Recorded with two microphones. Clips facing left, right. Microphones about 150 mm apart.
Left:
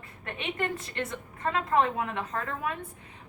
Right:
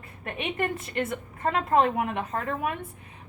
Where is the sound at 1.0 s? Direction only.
25° right (ahead or behind).